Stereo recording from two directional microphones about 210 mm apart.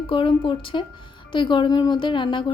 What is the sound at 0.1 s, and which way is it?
Speech, 25° left (ahead or behind).